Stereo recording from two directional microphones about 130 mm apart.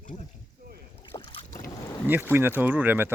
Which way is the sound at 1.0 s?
40° left (ahead or behind).